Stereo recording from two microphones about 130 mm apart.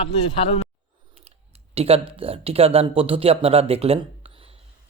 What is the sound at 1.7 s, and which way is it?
Speech, 50° right (ahead or behind).